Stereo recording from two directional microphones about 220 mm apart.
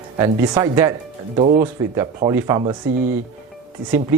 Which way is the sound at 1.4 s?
30° right (ahead or behind).